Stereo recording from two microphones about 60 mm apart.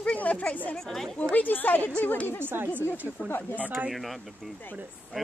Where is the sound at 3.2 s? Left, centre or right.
Left.